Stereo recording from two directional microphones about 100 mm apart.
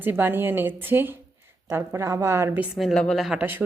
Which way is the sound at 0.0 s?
20° right (ahead or behind).